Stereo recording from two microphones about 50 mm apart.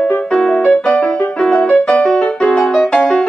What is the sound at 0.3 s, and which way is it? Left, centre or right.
Music, centre.